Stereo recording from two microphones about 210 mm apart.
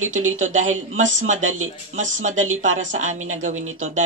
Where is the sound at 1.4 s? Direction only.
80° right.